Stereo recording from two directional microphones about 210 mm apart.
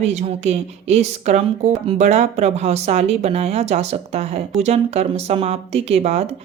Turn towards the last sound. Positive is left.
turn(degrees=-30)  # may be behind; listen again after turning